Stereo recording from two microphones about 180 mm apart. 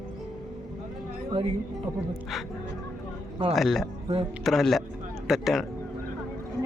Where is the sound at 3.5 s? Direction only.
Centre (ahead or behind).